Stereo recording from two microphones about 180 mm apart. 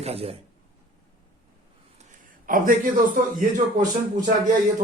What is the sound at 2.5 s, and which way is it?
Speech, 50° right (ahead or behind).